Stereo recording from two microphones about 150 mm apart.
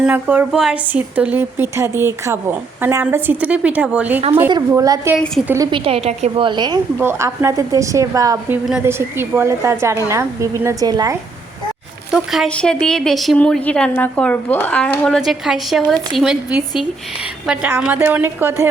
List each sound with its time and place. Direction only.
0.0 s a woman's voice: 10° right (ahead or behind)
4.7 s a woman's voice: 20° right (ahead or behind)
5.5 s a woman's voice: 35° right (ahead or behind)
7.0 s a woman's voice: 20° right (ahead or behind)
12.1 s a woman's voice: centre (ahead or behind)